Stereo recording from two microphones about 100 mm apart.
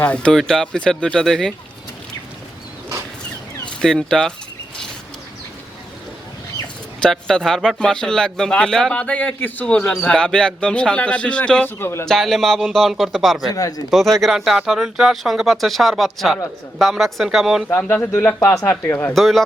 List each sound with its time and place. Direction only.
0.0 s speech: 10° left (ahead or behind)
3.8 s speech: 5° left (ahead or behind)
7.0 s speech: 5° left (ahead or behind)
11.8 s speech: 25° left (ahead or behind)
12.0 s speech: 5° left (ahead or behind)
13.5 s speech: 40° left (ahead or behind)
13.9 s speech: centre (ahead or behind)
17.7 s speech: 20° left (ahead or behind)
19.1 s speech: centre (ahead or behind)